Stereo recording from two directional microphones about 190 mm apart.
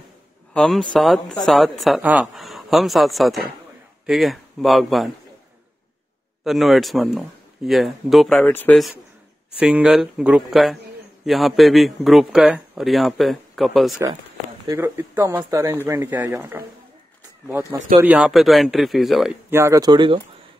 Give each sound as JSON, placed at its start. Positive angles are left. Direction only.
{"t": 0.5, "sound": "a man's voice", "side_deg": 5}
{"t": 6.4, "sound": "a man's voice", "side_deg": 0}
{"t": 9.6, "sound": "a man's voice", "side_deg": -5}
{"t": 14.7, "sound": "a man's voice", "side_deg": -15}
{"t": 19.5, "sound": "speech", "side_deg": -15}